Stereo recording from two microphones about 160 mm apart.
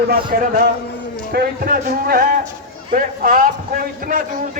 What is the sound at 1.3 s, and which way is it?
A man's voice, 65° right (ahead or behind).